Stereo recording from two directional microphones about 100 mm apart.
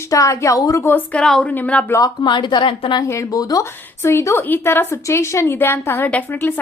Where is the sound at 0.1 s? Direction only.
35° left (ahead or behind).